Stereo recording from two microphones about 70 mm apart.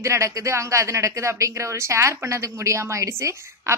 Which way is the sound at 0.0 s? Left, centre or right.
Right.